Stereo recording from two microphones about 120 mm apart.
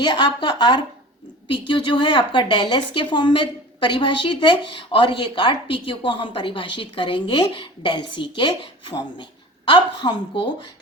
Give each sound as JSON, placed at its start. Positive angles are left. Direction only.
{"t": 0.0, "sound": "a woman's voice", "side_deg": 40}